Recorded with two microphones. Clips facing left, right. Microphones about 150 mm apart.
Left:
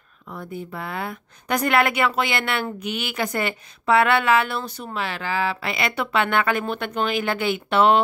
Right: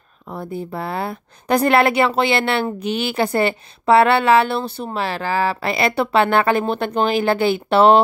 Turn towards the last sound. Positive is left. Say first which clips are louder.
# right 5 dB
turn(degrees=-35)  # may be behind; listen again after turning